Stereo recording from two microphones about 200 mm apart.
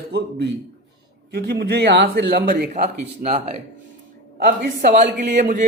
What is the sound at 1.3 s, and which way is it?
A man's voice, 55° right (ahead or behind).